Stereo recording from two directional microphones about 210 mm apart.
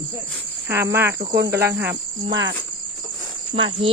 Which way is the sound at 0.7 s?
10° right (ahead or behind).